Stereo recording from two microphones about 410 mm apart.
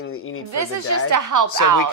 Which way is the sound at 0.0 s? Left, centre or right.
Left.